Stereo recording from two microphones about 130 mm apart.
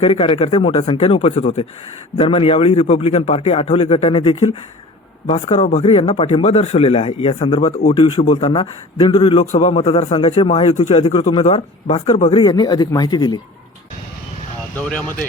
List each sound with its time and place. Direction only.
0.0 s speech: 45° left (ahead or behind)
0.9 s speech: 50° left (ahead or behind)
2.2 s speech: 45° left (ahead or behind)
5.2 s speech: 60° left (ahead or behind); by 8.3 s 40° left (ahead or behind)
8.3 s speech: 55° left (ahead or behind)
9.0 s speech: 40° left (ahead or behind)
9.4 s a man's voice: 60° left (ahead or behind)
9.7 s speech: 40° left (ahead or behind)
12.3 s speech: 40° left (ahead or behind)
14.8 s speech: 10° left (ahead or behind)